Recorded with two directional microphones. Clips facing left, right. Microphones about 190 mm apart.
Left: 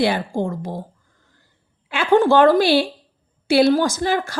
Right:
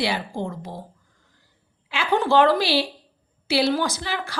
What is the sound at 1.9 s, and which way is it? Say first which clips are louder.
Speech: left 5 dB; 50° left (ahead or behind).